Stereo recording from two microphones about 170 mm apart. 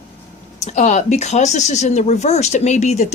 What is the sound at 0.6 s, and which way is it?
Speech, 45° left (ahead or behind).